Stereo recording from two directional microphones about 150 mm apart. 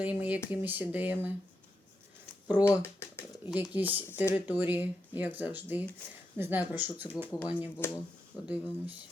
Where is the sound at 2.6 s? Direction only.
15° left (ahead or behind).